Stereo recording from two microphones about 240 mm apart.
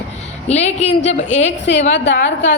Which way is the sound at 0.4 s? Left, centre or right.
Left.